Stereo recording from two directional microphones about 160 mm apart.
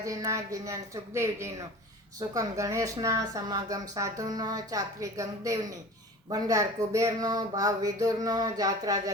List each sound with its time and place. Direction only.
0.0 s a woman's voice: 20° right (ahead or behind)